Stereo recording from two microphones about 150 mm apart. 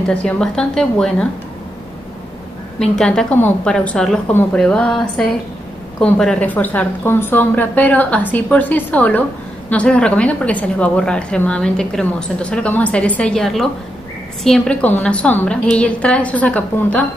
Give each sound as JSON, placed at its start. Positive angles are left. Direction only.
{"t": 0.1, "sound": "a woman's voice", "side_deg": 5}
{"t": 2.8, "sound": "a woman's voice", "side_deg": 5}